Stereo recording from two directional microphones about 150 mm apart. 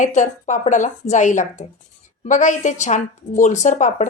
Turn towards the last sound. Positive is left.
turn(degrees=55)  # may be behind; listen again after turning